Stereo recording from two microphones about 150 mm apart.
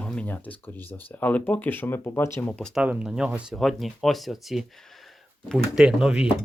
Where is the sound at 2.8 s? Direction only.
5° right (ahead or behind).